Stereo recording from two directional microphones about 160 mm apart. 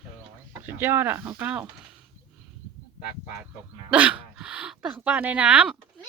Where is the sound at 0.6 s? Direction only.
15° right (ahead or behind).